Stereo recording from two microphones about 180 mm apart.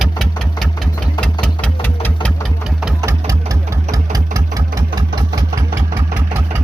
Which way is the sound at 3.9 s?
20° right (ahead or behind).